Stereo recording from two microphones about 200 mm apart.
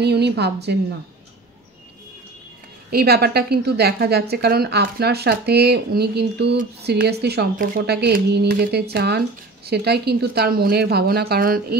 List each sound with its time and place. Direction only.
0.0 s a woman's voice: 55° right (ahead or behind)
2.9 s a woman's voice: 50° right (ahead or behind)